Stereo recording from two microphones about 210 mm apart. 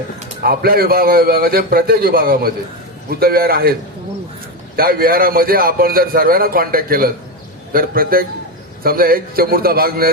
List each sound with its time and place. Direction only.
0.4 s a man's voice: 45° right (ahead or behind)
4.8 s a man's voice: 45° right (ahead or behind)